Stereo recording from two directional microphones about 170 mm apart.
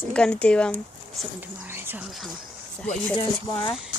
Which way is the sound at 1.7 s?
10° right (ahead or behind).